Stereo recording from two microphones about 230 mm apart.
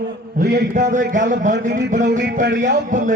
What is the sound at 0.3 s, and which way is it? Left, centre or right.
A man's voice, right.